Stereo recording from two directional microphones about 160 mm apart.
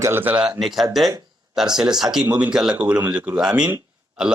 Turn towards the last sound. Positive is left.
turn(degrees=-5)  # may be behind; listen again after turning